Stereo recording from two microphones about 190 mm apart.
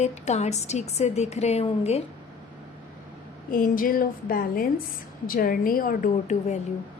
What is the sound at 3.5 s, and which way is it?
A woman's voice, 45° left (ahead or behind).